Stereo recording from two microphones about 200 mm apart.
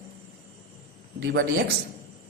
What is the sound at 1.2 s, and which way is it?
Speech, 55° right (ahead or behind).